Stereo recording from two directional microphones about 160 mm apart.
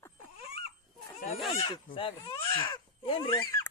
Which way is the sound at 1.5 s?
35° left (ahead or behind).